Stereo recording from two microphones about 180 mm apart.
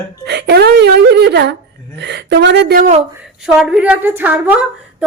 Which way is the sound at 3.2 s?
5° right (ahead or behind).